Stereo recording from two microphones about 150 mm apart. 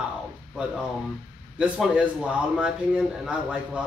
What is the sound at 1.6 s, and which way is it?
A man's voice, 5° right (ahead or behind).